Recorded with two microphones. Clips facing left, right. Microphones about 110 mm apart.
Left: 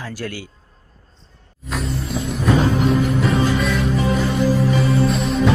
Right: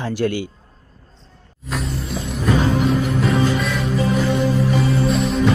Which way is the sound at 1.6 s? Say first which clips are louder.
Left 1 dB; centre (ahead or behind).